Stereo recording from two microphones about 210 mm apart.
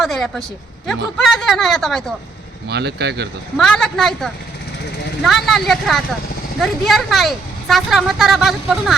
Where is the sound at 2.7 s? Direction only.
50° right (ahead or behind).